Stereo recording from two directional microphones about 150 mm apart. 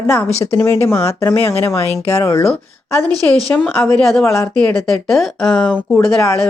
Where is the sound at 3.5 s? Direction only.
5° left (ahead or behind).